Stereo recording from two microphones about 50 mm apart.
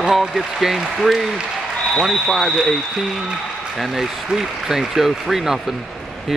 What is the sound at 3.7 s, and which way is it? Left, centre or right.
Speech, centre.